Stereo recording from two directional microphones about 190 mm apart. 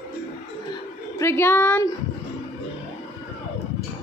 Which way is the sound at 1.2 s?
15° left (ahead or behind).